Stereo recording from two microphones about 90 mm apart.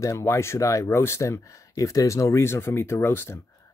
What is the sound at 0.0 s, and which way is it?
Speech, 35° left (ahead or behind).